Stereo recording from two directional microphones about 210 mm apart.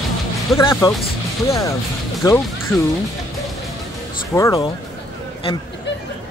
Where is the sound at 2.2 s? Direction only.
15° left (ahead or behind).